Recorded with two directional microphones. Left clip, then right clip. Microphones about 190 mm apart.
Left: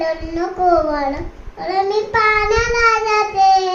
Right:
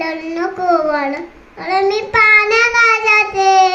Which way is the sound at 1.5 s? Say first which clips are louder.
Right 2 dB; 25° right (ahead or behind).